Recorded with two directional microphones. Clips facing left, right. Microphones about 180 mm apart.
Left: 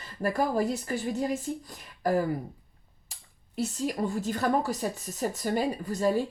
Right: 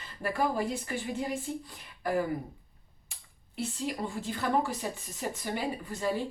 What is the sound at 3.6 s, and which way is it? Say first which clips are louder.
A woman's voice: left 4 dB; 40° left (ahead or behind).